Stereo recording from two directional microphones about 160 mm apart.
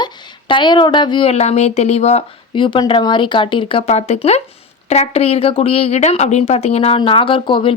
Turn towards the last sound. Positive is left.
turn(degrees=30)  # may be behind; listen again after turning